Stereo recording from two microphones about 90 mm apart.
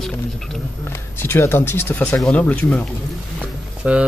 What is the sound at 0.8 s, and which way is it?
Speech, 25° left (ahead or behind).